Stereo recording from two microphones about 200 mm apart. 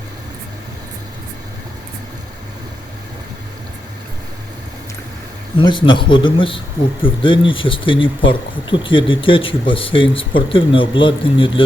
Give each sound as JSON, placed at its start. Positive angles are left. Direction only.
{"t": 5.5, "sound": "speech", "side_deg": 25}